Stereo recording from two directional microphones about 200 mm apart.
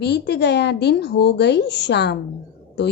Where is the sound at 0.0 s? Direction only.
55° left (ahead or behind).